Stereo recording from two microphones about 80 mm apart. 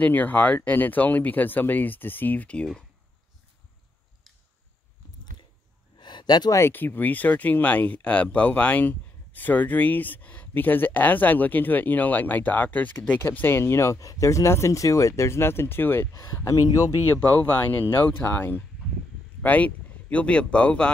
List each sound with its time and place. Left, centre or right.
0.0 s speech: left
5.9 s a sound: left
6.7 s speech: left
16.1 s speech: left
18.0 s speech: left